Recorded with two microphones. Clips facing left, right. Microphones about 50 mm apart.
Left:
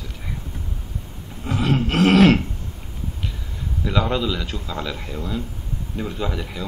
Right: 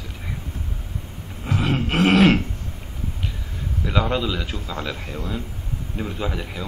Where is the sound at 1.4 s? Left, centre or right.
Centre.